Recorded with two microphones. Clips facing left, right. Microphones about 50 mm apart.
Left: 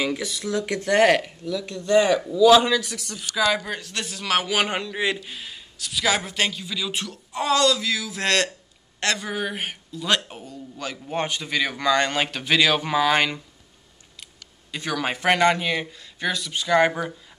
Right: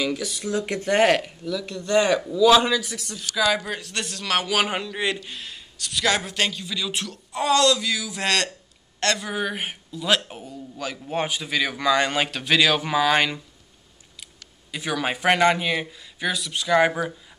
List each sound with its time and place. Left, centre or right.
0.0 s speech: left
0.6 s speech: centre
1.0 s a man's voice: centre
14.7 s a man's voice: centre